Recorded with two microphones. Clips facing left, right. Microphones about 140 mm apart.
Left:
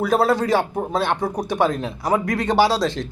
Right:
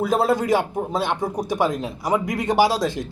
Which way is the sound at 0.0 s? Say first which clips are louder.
Left 1 dB; 20° right (ahead or behind).